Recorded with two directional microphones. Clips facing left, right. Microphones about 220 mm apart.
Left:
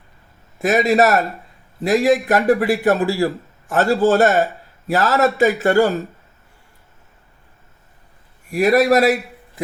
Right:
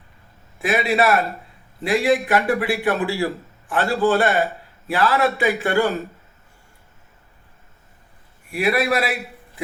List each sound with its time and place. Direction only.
0.6 s speech: 45° left (ahead or behind)
8.4 s speech: 45° left (ahead or behind)